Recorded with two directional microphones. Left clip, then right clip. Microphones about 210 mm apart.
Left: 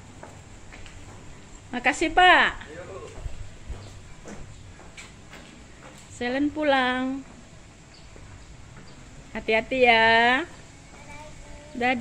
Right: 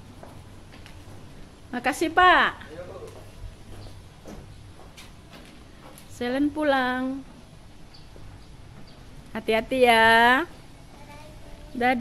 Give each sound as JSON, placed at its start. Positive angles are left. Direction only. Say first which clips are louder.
{"t": 1.7, "sound": "speech", "louder": "left 2 dB", "side_deg": -5}
{"t": 6.1, "sound": "speech", "louder": "even", "side_deg": -15}
{"t": 9.3, "sound": "speech", "louder": "even", "side_deg": -15}